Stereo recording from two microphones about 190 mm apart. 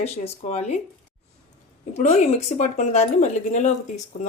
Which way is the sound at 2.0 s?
40° left (ahead or behind).